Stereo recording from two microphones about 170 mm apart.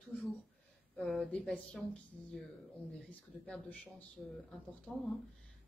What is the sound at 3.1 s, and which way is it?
Speech, 5° left (ahead or behind).